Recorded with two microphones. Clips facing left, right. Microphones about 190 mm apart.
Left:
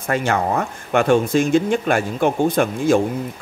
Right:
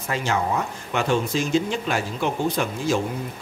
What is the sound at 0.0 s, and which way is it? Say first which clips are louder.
A man's voice: left 5 dB; 55° left (ahead or behind).